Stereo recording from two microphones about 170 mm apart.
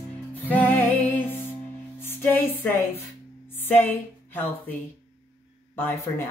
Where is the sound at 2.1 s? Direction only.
10° left (ahead or behind).